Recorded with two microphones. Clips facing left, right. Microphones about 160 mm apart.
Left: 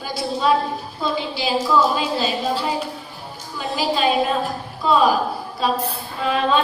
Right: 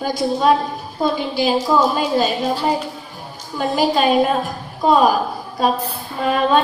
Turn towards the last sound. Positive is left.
turn(degrees=-50)  # may be behind; listen again after turning